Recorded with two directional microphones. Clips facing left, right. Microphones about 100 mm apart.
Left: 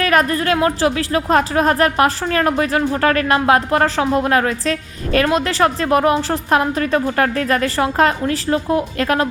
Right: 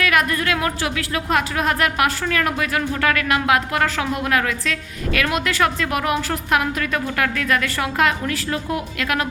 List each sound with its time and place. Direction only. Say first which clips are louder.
0.0 s speech: left 4 dB; 35° left (ahead or behind)